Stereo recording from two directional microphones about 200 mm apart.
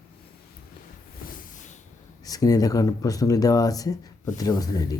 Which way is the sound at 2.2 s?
20° left (ahead or behind).